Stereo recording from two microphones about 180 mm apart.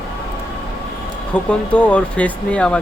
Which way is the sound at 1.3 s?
5° left (ahead or behind).